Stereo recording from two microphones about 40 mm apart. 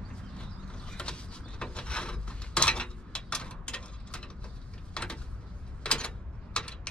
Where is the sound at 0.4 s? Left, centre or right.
Left.